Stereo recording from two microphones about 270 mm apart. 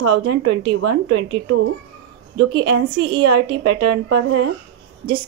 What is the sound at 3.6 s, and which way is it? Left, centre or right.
Speech, right.